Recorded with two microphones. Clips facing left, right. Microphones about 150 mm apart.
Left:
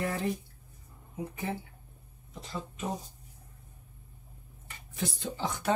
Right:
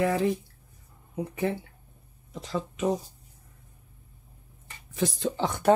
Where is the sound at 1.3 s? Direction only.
70° right (ahead or behind).